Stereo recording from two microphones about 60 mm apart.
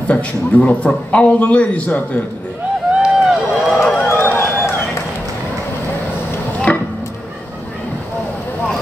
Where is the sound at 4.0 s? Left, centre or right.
Left.